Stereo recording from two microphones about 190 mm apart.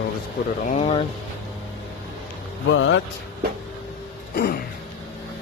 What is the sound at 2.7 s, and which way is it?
Speech, 80° left.